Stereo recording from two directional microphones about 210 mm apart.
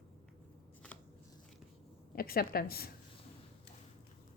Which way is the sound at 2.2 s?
45° left (ahead or behind).